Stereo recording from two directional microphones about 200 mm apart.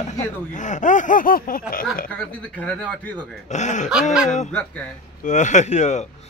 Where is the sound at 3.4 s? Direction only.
35° left (ahead or behind).